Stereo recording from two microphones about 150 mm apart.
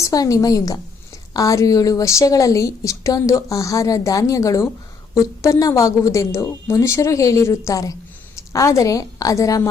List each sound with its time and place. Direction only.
0.0 s a woman's voice: 20° left (ahead or behind)